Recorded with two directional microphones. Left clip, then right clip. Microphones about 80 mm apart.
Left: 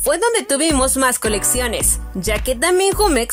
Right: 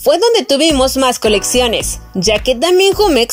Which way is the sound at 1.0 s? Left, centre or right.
Centre.